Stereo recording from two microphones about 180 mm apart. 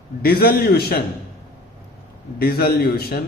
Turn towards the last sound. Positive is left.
turn(degrees=60)  # may be behind; listen again after turning